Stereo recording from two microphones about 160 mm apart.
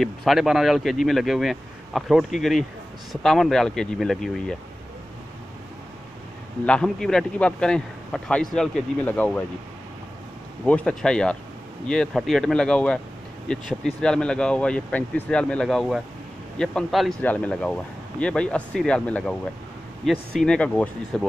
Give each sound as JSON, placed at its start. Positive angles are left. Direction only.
{"t": 0.0, "sound": "a man's voice", "side_deg": 0}
{"t": 6.6, "sound": "a man's voice", "side_deg": 5}
{"t": 10.6, "sound": "a man's voice", "side_deg": 5}